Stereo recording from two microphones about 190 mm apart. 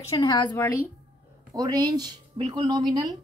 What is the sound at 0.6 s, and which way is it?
Speech, 10° left (ahead or behind).